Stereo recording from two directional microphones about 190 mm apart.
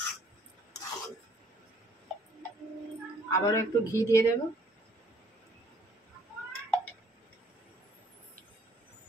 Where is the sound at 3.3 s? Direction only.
15° left (ahead or behind).